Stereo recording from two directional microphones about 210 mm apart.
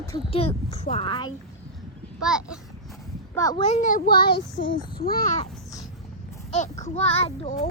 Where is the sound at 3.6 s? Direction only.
35° left (ahead or behind); by 4.7 s 55° left (ahead or behind).